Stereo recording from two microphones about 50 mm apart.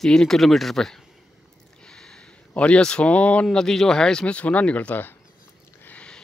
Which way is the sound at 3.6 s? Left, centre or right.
Centre.